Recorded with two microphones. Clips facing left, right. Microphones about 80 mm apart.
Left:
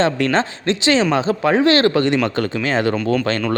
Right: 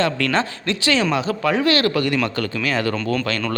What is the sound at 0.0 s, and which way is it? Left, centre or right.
Speech, left.